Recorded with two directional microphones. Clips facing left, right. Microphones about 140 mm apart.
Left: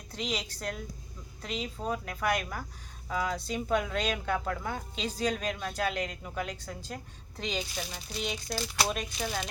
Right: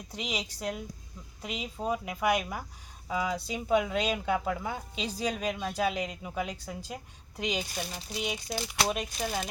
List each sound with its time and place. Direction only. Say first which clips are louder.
0.1 s speech: left 1 dB; 10° right (ahead or behind)
8.4 s speech: even; 20° right (ahead or behind)
8.8 s speech: right 2 dB; 5° right (ahead or behind)